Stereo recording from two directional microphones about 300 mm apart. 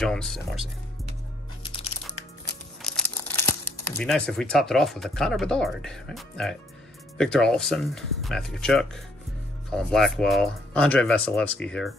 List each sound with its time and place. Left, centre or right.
0.0 s speech: centre
1.6 s music: centre
2.8 s speech: centre